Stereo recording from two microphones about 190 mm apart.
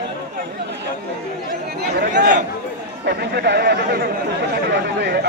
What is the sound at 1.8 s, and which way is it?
Speech, 60° right (ahead or behind).